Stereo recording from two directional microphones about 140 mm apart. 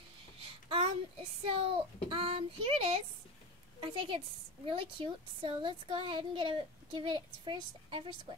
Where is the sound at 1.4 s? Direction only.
40° right (ahead or behind).